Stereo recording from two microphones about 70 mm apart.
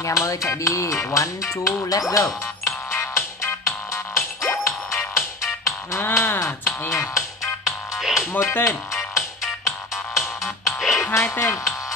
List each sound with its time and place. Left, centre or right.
0.0 s music: left
7.6 s music: centre
8.3 s speech: left
8.9 s music: centre
11.3 s speech: left